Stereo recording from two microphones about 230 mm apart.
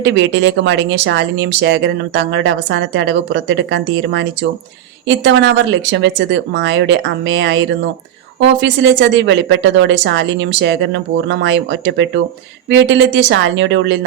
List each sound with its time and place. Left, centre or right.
0.0 s speech: right